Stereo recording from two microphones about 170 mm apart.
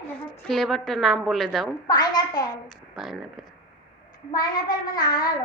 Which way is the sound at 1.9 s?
25° left (ahead or behind).